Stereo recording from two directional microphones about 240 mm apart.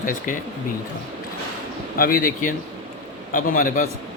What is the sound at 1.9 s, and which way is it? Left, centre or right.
A man's voice, left.